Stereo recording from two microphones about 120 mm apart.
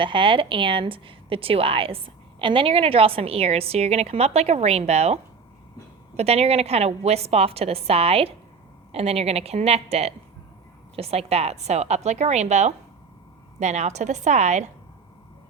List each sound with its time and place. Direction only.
0.0 s a woman's voice: 45° right (ahead or behind); by 14.7 s 70° right (ahead or behind)